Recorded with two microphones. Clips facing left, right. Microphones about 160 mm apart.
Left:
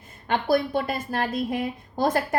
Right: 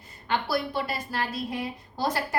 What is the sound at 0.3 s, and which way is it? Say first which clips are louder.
A woman's voice: left 5 dB; 50° left (ahead or behind).